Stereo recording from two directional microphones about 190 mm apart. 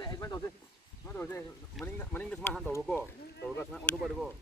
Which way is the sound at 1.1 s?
10° left (ahead or behind).